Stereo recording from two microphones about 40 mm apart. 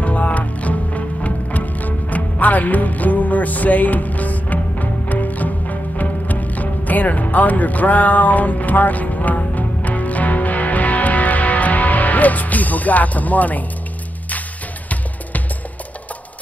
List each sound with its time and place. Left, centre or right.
0.0 s music: left